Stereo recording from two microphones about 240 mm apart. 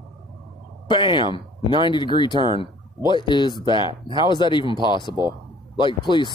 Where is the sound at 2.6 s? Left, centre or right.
Centre.